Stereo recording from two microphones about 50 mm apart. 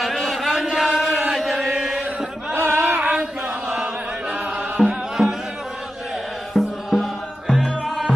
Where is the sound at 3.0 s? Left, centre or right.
Right.